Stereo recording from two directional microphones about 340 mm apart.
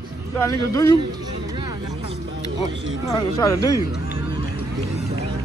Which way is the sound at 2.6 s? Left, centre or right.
Centre.